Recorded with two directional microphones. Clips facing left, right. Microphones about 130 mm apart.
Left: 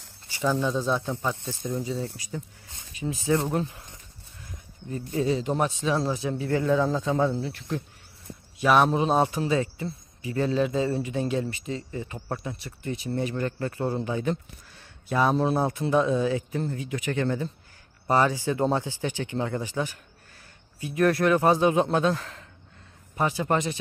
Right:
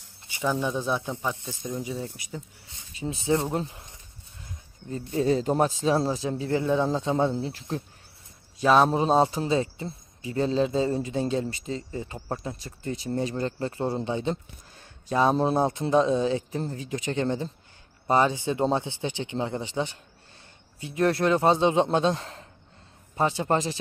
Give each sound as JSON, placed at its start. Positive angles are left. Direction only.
{"t": 0.3, "sound": "a man's voice", "side_deg": -15}
{"t": 4.5, "sound": "a sound", "side_deg": -25}
{"t": 5.2, "sound": "a man's voice", "side_deg": -40}